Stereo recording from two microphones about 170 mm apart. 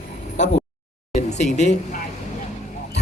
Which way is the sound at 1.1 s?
45° left (ahead or behind).